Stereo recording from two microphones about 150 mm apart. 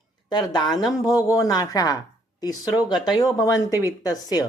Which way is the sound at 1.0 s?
25° left (ahead or behind).